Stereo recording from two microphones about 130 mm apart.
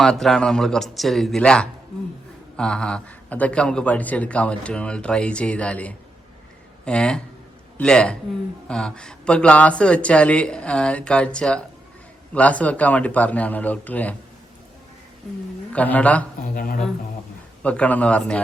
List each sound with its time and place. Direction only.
0.0 s a man's voice: 5° left (ahead or behind)
15.7 s a man's voice: 10° left (ahead or behind)
16.6 s speech: 90° left
17.6 s a man's voice: 10° left (ahead or behind)